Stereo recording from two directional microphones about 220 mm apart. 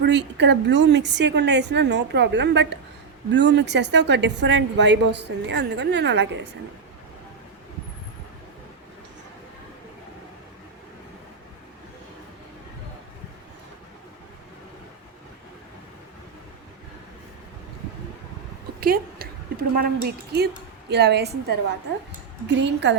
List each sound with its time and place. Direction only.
0.0 s a woman's voice: 50° right (ahead or behind)
18.8 s a sound: 45° right (ahead or behind)
20.9 s a woman's voice: 50° right (ahead or behind)